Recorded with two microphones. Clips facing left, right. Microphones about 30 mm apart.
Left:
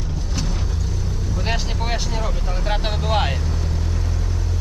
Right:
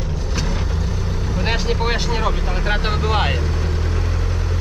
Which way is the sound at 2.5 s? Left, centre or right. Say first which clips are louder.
Right 3 dB; centre.